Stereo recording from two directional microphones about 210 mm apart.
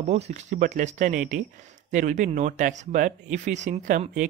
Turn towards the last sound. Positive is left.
turn(degrees=-35)  # may be behind; listen again after turning